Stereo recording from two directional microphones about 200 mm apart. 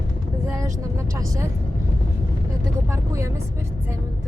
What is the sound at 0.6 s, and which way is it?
Speech, 15° right (ahead or behind).